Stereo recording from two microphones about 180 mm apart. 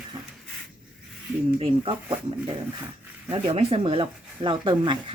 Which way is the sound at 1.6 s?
30° right (ahead or behind).